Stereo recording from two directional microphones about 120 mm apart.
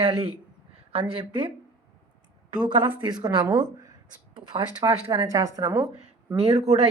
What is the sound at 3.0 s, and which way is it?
Speech, 35° right (ahead or behind).